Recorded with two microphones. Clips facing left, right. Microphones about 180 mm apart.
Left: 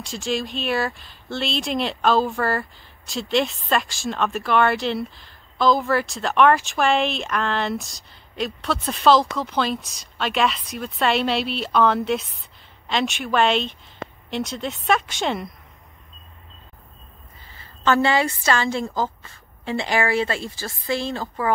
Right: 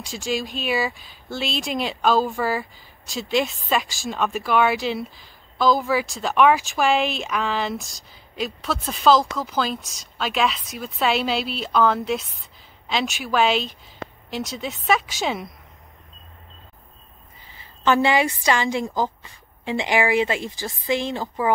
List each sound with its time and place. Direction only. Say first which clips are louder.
0.0 s speech: left 1 dB; centre (ahead or behind)
17.5 s a woman's voice: even; 15° right (ahead or behind)